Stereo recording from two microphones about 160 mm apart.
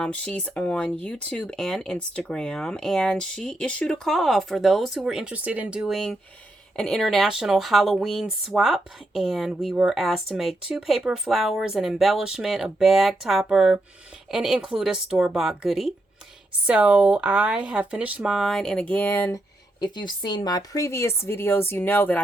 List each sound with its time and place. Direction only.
0.0 s speech: 5° left (ahead or behind)
19.8 s speech: 30° left (ahead or behind); by 22.2 s 10° left (ahead or behind)